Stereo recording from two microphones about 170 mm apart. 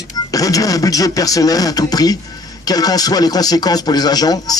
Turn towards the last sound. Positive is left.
turn(degrees=25)  # may be behind; listen again after turning